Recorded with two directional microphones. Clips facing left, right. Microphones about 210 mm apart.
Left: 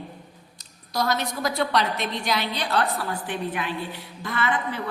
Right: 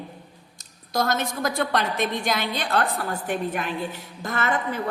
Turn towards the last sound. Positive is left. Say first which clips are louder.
# right 1 dB
turn(degrees=-45)  # may be behind; listen again after turning